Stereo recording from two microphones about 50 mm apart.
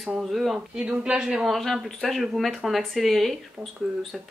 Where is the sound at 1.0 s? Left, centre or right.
Centre.